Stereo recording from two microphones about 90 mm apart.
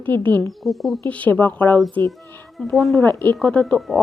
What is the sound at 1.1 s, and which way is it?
Speech, 20° left (ahead or behind).